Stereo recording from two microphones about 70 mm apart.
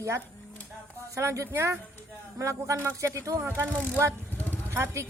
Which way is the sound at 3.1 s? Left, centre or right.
Right.